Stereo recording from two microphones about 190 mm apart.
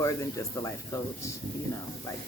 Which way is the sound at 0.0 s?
15° left (ahead or behind).